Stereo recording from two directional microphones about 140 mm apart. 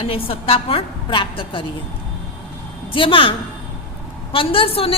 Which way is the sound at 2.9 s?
40° left (ahead or behind).